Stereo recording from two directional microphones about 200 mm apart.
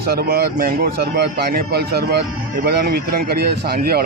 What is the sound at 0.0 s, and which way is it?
Speech, 50° right (ahead or behind).